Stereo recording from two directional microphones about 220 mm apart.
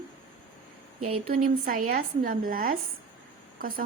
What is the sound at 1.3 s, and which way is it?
Speech, 40° right (ahead or behind).